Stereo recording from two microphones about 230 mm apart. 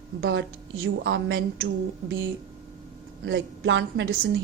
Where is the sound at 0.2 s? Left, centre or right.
Right.